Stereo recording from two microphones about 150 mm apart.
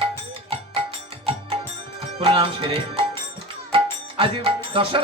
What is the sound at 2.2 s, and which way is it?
Music, 35° right (ahead or behind).